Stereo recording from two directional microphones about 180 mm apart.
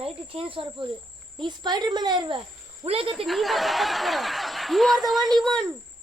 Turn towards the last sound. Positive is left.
turn(degrees=0)  # may be behind; listen again after turning